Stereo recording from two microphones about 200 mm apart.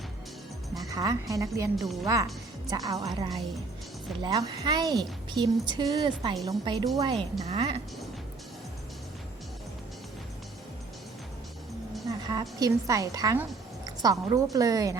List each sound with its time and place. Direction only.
0.9 s a woman's voice: 15° right (ahead or behind)
1.7 s a woman's voice: centre (ahead or behind)
2.6 s a woman's voice: 20° right (ahead or behind)
12.3 s a woman's voice: 20° right (ahead or behind)